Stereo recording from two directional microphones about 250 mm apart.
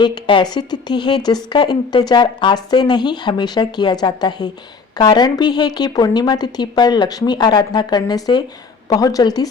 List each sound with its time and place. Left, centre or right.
0.0 s a woman's voice: centre